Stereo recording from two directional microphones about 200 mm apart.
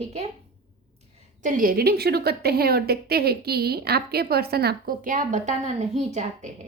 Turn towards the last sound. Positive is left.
turn(degrees=-35)  # may be behind; listen again after turning